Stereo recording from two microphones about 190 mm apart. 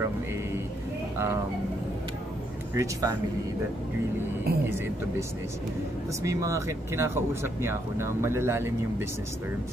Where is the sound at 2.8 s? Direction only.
20° right (ahead or behind).